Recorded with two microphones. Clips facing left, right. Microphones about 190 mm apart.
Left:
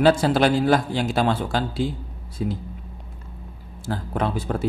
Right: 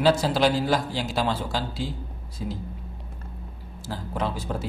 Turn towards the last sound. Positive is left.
turn(degrees=55)  # may be behind; listen again after turning